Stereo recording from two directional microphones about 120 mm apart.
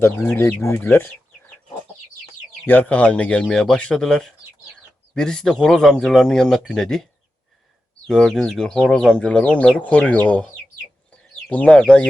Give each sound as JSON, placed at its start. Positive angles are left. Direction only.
{"t": 0.3, "sound": "speech", "side_deg": 20}
{"t": 2.6, "sound": "speech", "side_deg": 15}
{"t": 8.0, "sound": "speech", "side_deg": 5}
{"t": 11.4, "sound": "speech", "side_deg": 10}